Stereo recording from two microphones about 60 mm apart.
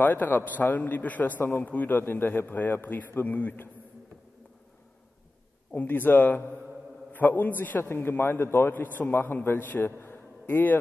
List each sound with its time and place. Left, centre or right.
0.0 s a man's voice: left
5.8 s a man's voice: left